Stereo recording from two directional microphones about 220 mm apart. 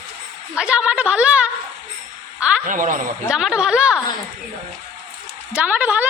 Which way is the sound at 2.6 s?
35° right (ahead or behind).